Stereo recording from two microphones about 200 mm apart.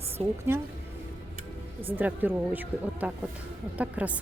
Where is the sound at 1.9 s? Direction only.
10° right (ahead or behind).